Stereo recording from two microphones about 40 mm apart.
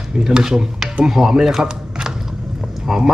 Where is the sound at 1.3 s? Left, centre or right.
Centre.